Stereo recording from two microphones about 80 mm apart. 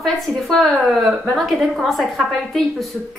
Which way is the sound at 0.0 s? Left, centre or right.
Centre.